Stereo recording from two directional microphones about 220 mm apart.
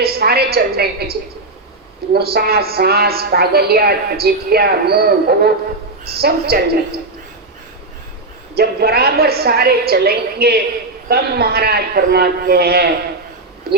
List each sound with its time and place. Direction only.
0.0 s a woman's voice: 45° right (ahead or behind)
2.1 s a woman's voice: 45° right (ahead or behind)
8.5 s a woman's voice: 45° right (ahead or behind)